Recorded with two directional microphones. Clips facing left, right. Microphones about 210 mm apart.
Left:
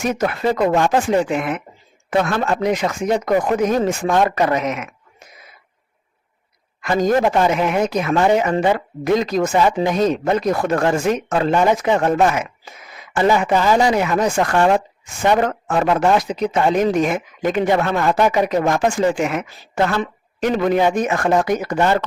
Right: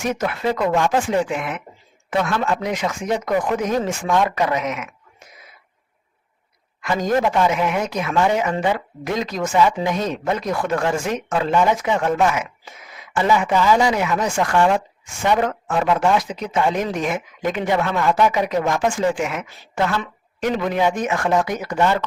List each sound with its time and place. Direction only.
0.2 s speech: 40° left (ahead or behind)
6.8 s speech: 40° left (ahead or behind)